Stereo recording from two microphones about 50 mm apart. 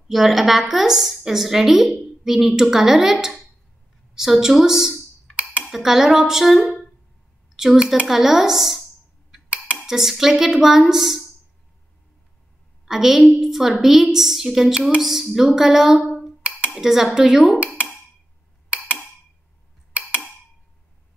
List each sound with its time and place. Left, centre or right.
0.1 s a woman's voice: centre
5.3 s dishes: right
5.7 s a woman's voice: centre
9.8 s a woman's voice: centre
12.8 s a woman's voice: centre
17.6 s speech: right